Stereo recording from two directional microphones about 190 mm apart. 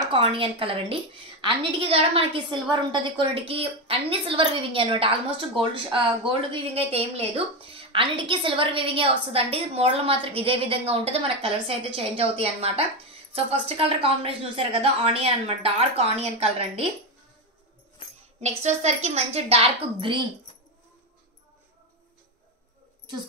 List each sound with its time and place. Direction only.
0.1 s a woman's voice: 30° right (ahead or behind)
18.4 s a woman's voice: 35° right (ahead or behind)